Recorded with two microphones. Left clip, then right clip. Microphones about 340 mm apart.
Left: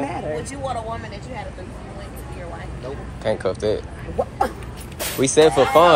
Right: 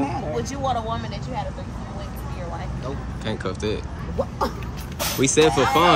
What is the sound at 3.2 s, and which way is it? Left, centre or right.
Speech, centre.